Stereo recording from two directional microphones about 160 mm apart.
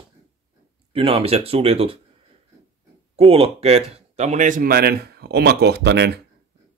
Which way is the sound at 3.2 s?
35° right (ahead or behind).